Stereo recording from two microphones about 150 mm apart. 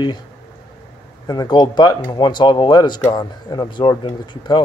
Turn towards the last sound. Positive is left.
turn(degrees=30)  # may be behind; listen again after turning